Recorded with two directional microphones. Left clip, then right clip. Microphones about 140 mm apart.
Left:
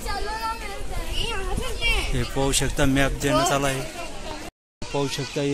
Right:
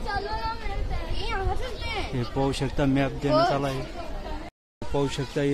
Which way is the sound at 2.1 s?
5° right (ahead or behind).